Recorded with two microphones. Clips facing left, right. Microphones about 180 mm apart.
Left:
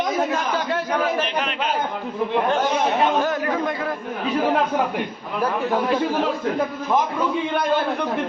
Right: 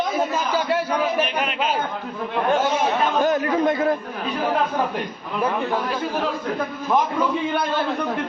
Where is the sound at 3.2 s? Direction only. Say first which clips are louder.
Right 3 dB; 20° right (ahead or behind).